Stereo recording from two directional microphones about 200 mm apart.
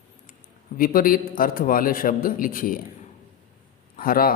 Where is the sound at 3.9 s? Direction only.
45° left (ahead or behind).